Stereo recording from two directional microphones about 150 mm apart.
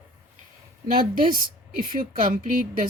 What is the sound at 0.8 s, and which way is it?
A woman's voice, 70° right (ahead or behind).